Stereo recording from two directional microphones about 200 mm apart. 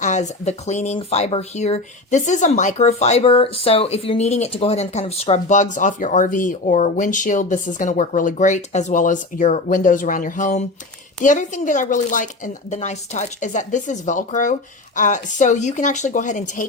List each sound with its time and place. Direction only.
0.0 s speech: 35° left (ahead or behind)